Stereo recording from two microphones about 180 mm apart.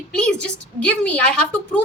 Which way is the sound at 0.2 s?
5° left (ahead or behind).